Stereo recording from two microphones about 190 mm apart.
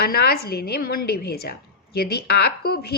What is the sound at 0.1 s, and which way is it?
A woman's voice, 55° left (ahead or behind).